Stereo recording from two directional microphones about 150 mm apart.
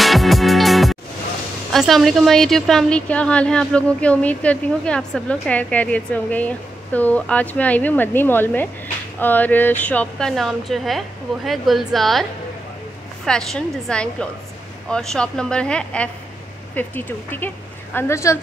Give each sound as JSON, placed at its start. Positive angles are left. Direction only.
{"t": 0.0, "sound": "music", "side_deg": 0}
{"t": 1.7, "sound": "a woman's voice", "side_deg": 0}